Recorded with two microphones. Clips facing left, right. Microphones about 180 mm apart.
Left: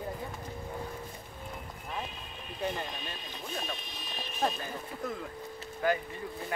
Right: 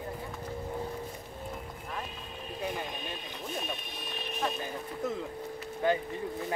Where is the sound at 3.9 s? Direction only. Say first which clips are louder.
Right 2 dB; 60° right (ahead or behind).